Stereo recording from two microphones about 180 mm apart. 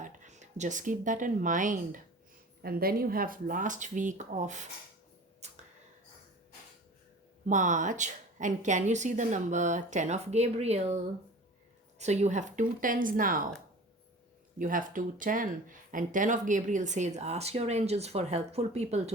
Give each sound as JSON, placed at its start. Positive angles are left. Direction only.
{"t": 0.0, "sound": "a woman's voice", "side_deg": -40}
{"t": 5.4, "sound": "a sound", "side_deg": -35}
{"t": 7.4, "sound": "a woman's voice", "side_deg": -45}
{"t": 14.6, "sound": "speech", "side_deg": -50}